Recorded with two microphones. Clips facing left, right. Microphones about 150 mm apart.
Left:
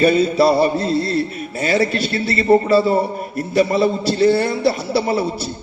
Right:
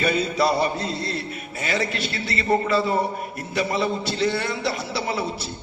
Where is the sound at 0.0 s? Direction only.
30° left (ahead or behind).